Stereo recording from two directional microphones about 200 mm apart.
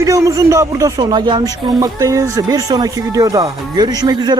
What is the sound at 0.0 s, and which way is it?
Speech, 15° right (ahead or behind).